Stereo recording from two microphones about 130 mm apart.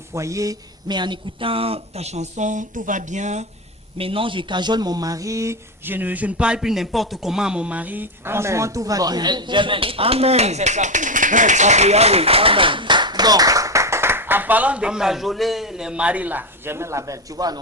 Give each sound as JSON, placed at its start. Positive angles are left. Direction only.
{"t": 0.1, "sound": "speech", "side_deg": -25}
{"t": 3.9, "sound": "speech", "side_deg": -45}